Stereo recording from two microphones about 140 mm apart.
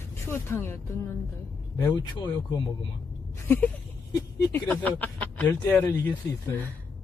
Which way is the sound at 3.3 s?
15° left (ahead or behind).